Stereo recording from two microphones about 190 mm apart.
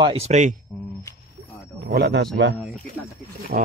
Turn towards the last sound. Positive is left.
turn(degrees=-50)  # may be behind; listen again after turning